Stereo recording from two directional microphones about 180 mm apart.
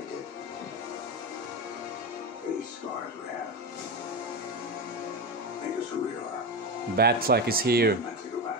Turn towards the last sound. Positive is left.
turn(degrees=-60)  # may be behind; listen again after turning